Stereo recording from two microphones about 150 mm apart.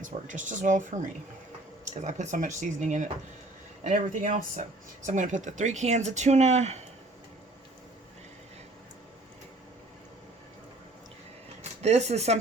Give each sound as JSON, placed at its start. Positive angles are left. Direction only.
{"t": 0.0, "sound": "speech", "side_deg": -60}
{"t": 11.8, "sound": "speech", "side_deg": -45}